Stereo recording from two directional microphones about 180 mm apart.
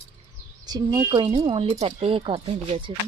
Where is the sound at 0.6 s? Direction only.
25° right (ahead or behind).